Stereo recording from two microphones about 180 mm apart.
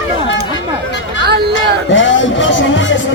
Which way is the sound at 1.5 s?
90° left.